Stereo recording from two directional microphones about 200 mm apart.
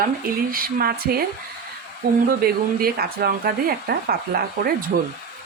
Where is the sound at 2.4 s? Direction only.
50° right (ahead or behind).